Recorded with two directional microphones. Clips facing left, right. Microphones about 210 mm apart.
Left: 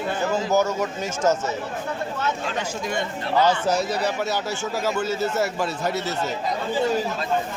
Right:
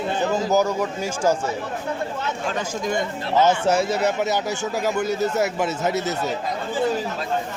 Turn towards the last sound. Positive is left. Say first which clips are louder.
# right 3 dB
turn(degrees=-20)  # may be behind; listen again after turning